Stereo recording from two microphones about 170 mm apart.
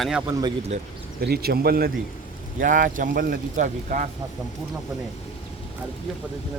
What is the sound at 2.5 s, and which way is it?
Speech, 50° right (ahead or behind).